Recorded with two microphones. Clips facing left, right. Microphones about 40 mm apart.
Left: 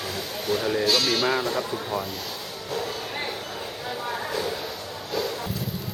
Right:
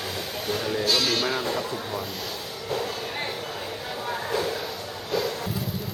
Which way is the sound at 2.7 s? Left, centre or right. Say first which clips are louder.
Even; centre.